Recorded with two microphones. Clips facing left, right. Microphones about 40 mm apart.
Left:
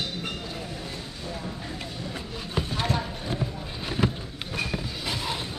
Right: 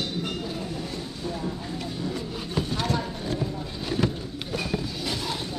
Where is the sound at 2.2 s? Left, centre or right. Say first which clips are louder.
Right 2 dB; centre.